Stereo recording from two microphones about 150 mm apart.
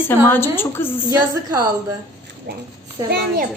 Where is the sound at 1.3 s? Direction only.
25° right (ahead or behind).